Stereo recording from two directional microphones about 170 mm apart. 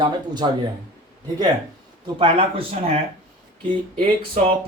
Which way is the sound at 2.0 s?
30° right (ahead or behind).